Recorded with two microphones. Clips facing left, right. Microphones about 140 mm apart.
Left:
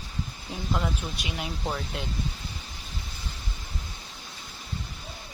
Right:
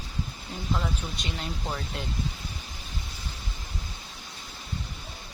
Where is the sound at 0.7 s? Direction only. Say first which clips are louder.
Left 1 dB; 5° left (ahead or behind).